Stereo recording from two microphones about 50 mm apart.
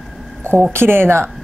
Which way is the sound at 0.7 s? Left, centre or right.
Right.